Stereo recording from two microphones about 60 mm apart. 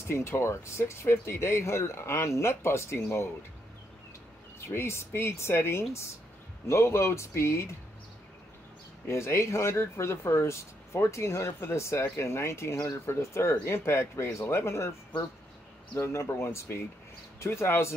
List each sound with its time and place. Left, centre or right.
0.1 s speech: left
4.6 s speech: left
9.0 s speech: left
16.0 s speech: left